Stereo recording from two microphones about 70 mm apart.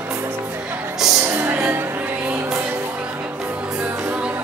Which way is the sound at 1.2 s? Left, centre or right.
Right.